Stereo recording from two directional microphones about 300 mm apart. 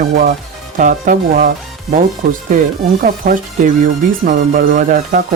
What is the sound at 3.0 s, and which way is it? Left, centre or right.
Speech, right.